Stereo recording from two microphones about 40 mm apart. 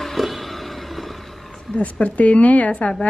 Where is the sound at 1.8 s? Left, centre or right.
Left.